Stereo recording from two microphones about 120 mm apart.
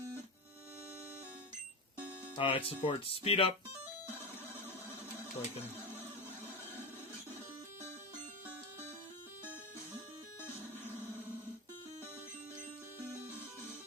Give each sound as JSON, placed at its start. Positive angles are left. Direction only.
{"t": 2.3, "sound": "speech", "side_deg": 50}